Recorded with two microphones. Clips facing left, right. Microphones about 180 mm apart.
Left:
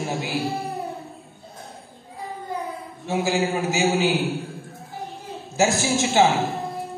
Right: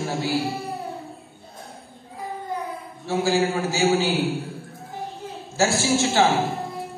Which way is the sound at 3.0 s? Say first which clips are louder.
Right 1 dB; 20° left (ahead or behind).